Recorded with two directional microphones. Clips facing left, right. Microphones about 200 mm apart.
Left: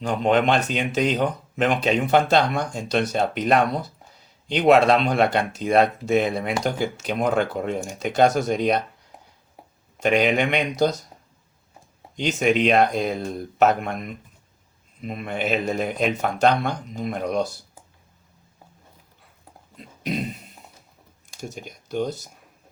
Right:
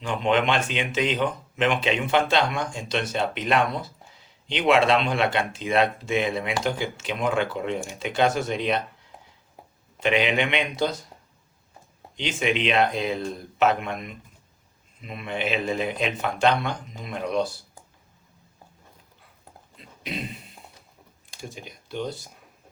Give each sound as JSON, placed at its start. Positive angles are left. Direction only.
{"t": 0.0, "sound": "speech", "side_deg": 40}
{"t": 10.0, "sound": "speech", "side_deg": 45}
{"t": 12.1, "sound": "speech", "side_deg": 40}
{"t": 19.7, "sound": "speech", "side_deg": 45}
{"t": 21.4, "sound": "speech", "side_deg": 45}